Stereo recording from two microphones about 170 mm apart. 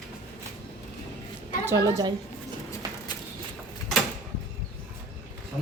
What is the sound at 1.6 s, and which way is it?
Speech, 20° right (ahead or behind).